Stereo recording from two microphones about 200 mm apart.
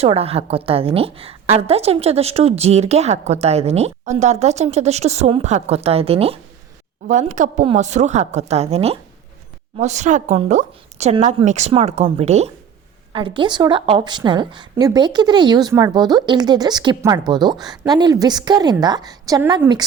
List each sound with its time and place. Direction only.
0.0 s a woman's voice: 30° right (ahead or behind)